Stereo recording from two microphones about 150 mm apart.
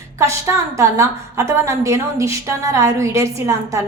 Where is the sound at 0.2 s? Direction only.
20° right (ahead or behind).